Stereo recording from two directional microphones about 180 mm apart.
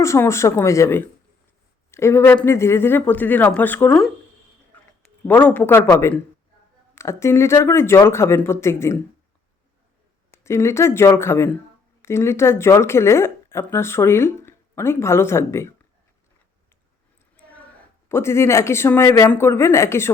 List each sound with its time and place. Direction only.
0.0 s speech: 15° left (ahead or behind)
5.2 s speech: 10° left (ahead or behind)
10.3 s speech: 15° left (ahead or behind)
18.1 s speech: 15° left (ahead or behind)